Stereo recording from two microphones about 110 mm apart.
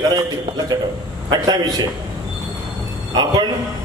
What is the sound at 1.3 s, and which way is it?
Speech, 40° right (ahead or behind).